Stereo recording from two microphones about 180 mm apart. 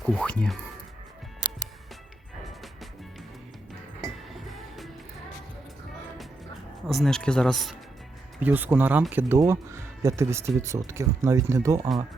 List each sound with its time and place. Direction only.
0.0 s speech: centre (ahead or behind)
4.4 s music: centre (ahead or behind)
6.8 s speech: centre (ahead or behind)
8.4 s speech: 10° right (ahead or behind)